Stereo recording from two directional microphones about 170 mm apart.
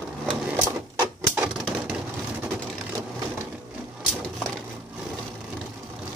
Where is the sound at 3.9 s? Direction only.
Centre (ahead or behind).